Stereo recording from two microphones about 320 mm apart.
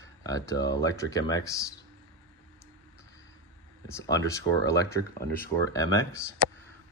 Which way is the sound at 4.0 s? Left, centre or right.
Centre.